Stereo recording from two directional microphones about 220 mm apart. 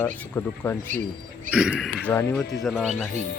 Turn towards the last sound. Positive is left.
turn(degrees=5)  # may be behind; listen again after turning